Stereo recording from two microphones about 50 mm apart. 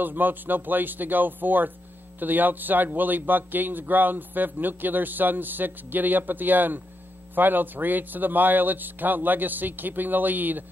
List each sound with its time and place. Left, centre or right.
0.0 s speech: right